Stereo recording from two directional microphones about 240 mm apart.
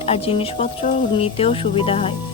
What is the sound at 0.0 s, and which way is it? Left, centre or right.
Speech, left.